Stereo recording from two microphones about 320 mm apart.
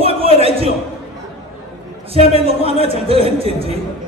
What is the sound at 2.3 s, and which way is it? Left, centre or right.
A man's voice, centre.